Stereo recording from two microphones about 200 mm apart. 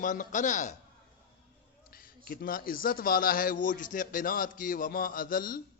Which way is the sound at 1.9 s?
45° left (ahead or behind).